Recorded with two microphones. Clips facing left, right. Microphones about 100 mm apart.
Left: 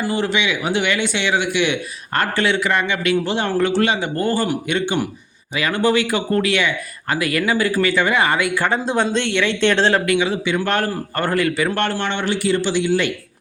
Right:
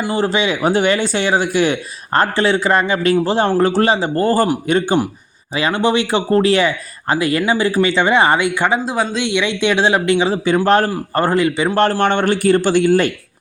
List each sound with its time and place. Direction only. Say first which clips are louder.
0.0 s speech: right 3 dB; 30° right (ahead or behind)
8.8 s speech: even; 5° right (ahead or behind)
10.1 s speech: right 4 dB; 30° right (ahead or behind); by 13.1 s 50° right (ahead or behind)